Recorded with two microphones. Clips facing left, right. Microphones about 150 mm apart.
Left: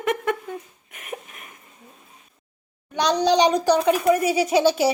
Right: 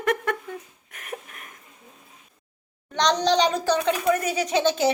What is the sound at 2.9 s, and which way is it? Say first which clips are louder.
A child's voice: left 2 dB; 10° left (ahead or behind).